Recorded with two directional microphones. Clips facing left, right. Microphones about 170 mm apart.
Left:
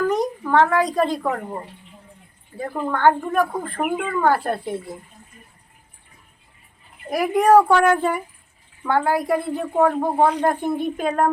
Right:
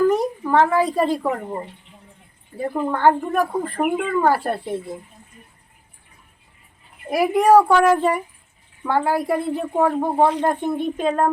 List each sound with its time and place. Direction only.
0.1 s a sound: 5° right (ahead or behind)
1.2 s a woman's voice: 10° right (ahead or behind)
7.1 s a woman's voice: 5° right (ahead or behind)